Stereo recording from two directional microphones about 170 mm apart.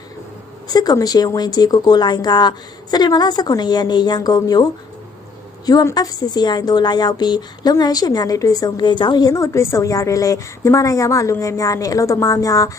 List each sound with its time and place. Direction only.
0.7 s a woman's voice: 20° left (ahead or behind)